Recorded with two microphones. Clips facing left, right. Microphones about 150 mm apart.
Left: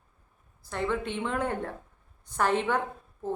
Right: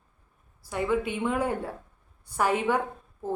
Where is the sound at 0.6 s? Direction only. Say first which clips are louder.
Right 3 dB; 10° right (ahead or behind).